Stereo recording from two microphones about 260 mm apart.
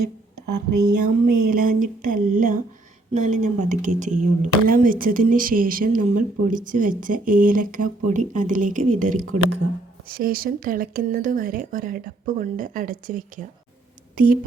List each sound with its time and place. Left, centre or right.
0.0 s speech: right
1.0 s speech: right
9.2 s speech: right
10.1 s speech: right